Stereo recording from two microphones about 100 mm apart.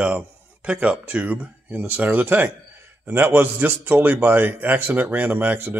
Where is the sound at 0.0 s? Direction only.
10° right (ahead or behind).